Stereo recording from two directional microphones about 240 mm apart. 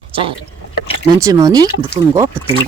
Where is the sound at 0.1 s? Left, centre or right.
Right.